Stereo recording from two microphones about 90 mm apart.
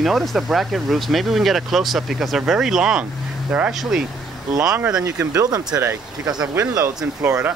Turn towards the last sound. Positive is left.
turn(degrees=-20)  # may be behind; listen again after turning